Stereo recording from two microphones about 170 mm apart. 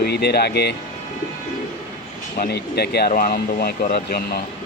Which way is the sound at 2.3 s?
70° left (ahead or behind).